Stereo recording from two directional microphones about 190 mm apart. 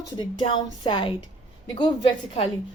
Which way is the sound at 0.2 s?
25° left (ahead or behind).